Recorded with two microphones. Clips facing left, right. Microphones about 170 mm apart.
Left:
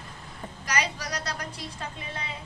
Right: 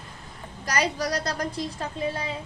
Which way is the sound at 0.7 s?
40° right (ahead or behind).